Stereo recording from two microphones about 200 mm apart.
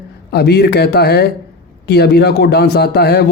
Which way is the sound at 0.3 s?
55° left (ahead or behind).